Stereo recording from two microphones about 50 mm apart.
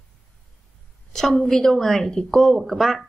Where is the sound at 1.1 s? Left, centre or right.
Centre.